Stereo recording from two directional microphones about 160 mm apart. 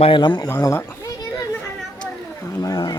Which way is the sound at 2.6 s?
25° left (ahead or behind).